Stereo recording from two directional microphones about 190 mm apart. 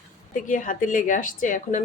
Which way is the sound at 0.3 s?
45° left (ahead or behind).